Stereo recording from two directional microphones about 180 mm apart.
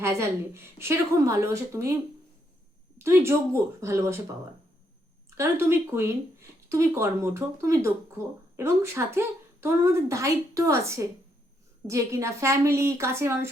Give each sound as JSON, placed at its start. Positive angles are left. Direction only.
{"t": 0.0, "sound": "a woman's voice", "side_deg": -15}
{"t": 3.0, "sound": "a woman's voice", "side_deg": -15}
{"t": 5.3, "sound": "a woman's voice", "side_deg": -15}